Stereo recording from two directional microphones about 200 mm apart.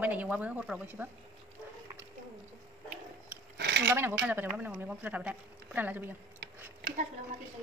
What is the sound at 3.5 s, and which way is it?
Cutlery, 55° right (ahead or behind).